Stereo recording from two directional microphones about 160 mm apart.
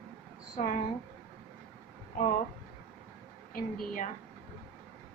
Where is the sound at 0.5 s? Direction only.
55° left (ahead or behind).